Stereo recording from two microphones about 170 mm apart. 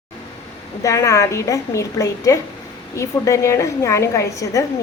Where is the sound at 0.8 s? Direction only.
20° left (ahead or behind).